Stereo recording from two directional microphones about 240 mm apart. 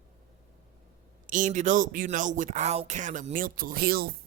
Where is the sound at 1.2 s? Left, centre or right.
Right.